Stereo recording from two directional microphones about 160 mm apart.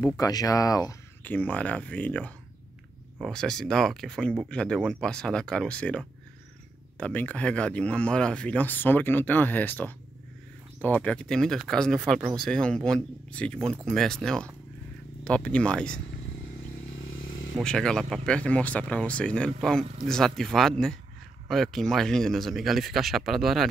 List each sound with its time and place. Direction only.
0.0 s speech: 25° left (ahead or behind)
1.2 s speech: 10° left (ahead or behind)
17.6 s speech: 5° left (ahead or behind)